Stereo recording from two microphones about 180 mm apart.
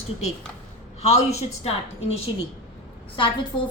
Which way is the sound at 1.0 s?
35° left (ahead or behind).